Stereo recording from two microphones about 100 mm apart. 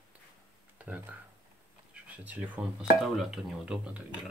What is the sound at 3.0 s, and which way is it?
Speech, 5° right (ahead or behind).